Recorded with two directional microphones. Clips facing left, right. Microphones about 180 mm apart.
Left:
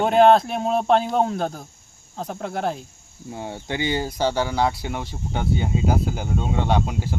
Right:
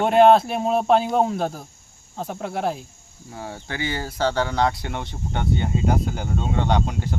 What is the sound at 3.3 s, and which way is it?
Speech, 20° left (ahead or behind).